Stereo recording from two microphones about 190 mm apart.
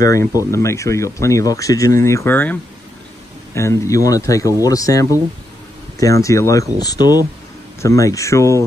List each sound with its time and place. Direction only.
0.0 s speech: 15° left (ahead or behind)